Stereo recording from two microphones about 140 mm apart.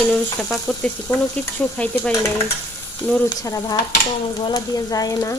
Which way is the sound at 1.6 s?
10° left (ahead or behind).